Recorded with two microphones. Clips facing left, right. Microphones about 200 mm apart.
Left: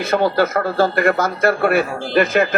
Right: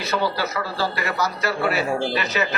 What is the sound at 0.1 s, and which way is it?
Speech, 50° left (ahead or behind).